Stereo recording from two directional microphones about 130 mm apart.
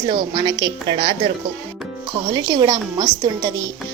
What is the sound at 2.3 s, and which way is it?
A woman's voice, 35° right (ahead or behind).